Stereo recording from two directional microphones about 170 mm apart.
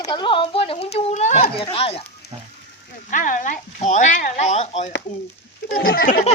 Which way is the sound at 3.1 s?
50° left (ahead or behind).